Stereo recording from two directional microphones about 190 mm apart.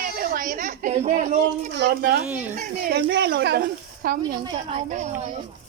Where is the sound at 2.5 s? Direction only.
40° right (ahead or behind).